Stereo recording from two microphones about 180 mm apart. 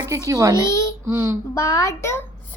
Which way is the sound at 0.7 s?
15° left (ahead or behind).